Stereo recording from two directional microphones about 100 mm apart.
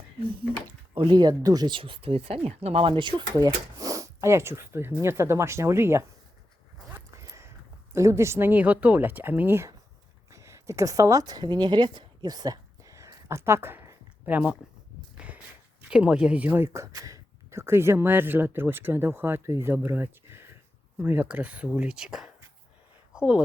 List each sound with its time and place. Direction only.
0.9 s speech: 50° right (ahead or behind)
1.7 s speech: 60° right (ahead or behind); by 6.1 s 25° right (ahead or behind)
6.9 s a sound: 30° right (ahead or behind)
7.9 s speech: 30° right (ahead or behind)
10.2 s a sound: 30° right (ahead or behind); by 15.4 s 15° right (ahead or behind)
15.9 s speech: 10° right (ahead or behind)